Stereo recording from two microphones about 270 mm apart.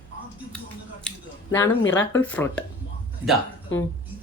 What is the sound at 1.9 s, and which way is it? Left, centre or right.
Speech, centre.